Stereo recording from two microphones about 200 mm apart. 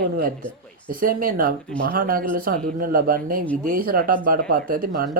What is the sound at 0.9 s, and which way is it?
Speech, 45° right (ahead or behind).